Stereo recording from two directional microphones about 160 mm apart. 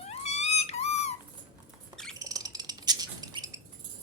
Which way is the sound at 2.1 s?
20° right (ahead or behind).